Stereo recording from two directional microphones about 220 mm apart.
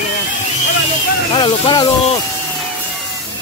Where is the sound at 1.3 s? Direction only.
20° left (ahead or behind).